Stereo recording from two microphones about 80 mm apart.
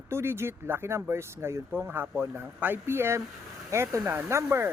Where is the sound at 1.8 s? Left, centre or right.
Right.